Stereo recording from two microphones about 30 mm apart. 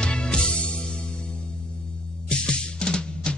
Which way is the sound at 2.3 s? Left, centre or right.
Left.